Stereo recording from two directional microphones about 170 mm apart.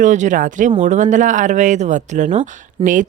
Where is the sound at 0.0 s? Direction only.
45° right (ahead or behind).